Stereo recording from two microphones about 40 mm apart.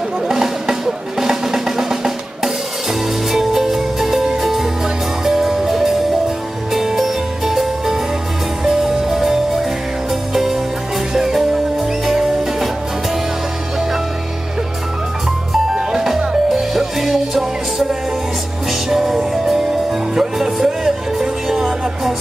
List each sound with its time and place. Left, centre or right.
0.3 s music: centre
15.9 s music: centre